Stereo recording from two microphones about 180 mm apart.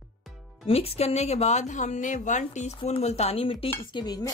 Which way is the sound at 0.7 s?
35° left (ahead or behind).